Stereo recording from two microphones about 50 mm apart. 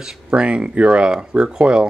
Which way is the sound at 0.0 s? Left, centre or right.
Centre.